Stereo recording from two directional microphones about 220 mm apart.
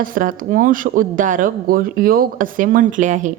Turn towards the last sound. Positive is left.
turn(degrees=-35)  # may be behind; listen again after turning